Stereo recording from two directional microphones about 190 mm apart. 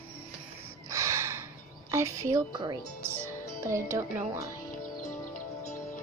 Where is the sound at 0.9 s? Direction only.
15° right (ahead or behind).